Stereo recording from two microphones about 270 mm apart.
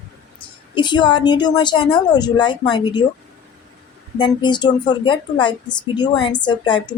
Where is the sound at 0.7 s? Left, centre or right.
Centre.